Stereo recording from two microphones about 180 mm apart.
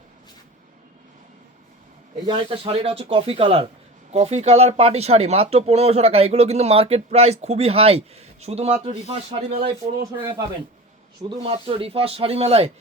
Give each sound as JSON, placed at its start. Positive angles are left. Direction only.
{"t": 2.2, "sound": "speech", "side_deg": -30}
{"t": 11.4, "sound": "speech", "side_deg": -30}